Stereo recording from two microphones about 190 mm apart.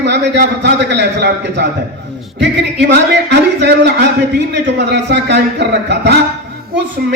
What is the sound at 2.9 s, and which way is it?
A man's voice, 65° right (ahead or behind).